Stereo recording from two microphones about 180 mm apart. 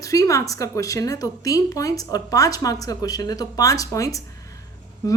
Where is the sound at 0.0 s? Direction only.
20° left (ahead or behind).